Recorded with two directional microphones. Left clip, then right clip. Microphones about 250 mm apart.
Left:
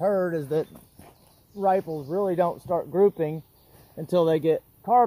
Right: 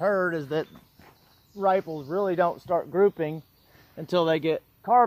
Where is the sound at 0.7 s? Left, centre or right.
Left.